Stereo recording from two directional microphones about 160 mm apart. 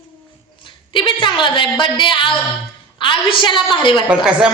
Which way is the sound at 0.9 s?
30° left (ahead or behind).